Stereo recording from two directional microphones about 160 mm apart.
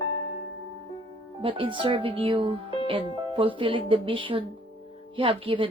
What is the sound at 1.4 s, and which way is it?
Speech, 35° right (ahead or behind).